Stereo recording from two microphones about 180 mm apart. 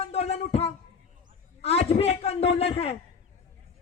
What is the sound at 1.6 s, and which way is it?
A man's voice, 35° left (ahead or behind).